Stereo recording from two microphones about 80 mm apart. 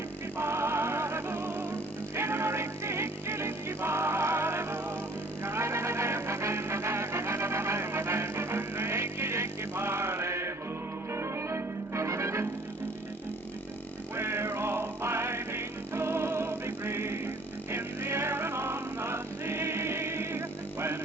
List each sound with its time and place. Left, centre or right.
0.3 s music: right
14.2 s music: right